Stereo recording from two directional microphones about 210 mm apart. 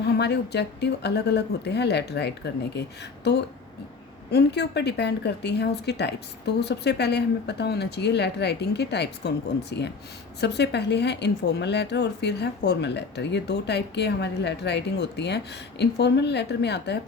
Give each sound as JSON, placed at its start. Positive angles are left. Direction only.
{"t": 0.0, "sound": "speech", "side_deg": 50}
{"t": 4.3, "sound": "speech", "side_deg": 50}